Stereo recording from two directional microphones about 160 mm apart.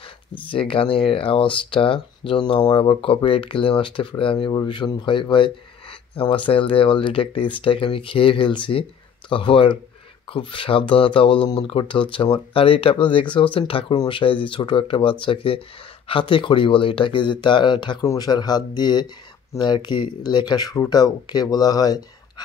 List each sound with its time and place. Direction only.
0.5 s speech: 35° left (ahead or behind)